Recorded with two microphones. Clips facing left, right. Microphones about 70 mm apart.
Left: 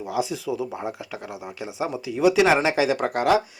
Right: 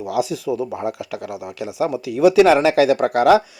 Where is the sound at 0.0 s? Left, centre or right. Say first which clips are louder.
Right 5 dB; right.